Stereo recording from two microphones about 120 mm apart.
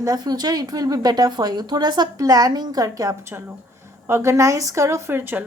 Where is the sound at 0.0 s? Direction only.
30° right (ahead or behind).